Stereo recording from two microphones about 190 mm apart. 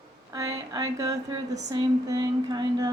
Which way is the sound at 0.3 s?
15° right (ahead or behind).